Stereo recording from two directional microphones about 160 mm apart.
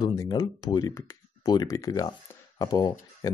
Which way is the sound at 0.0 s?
25° left (ahead or behind).